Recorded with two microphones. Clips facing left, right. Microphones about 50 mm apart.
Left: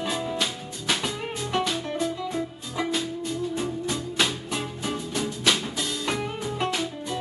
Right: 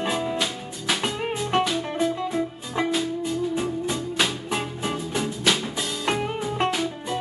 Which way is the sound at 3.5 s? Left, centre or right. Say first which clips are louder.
Right 2 dB; centre.